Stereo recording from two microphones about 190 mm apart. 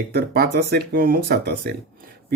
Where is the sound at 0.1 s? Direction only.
55° right (ahead or behind).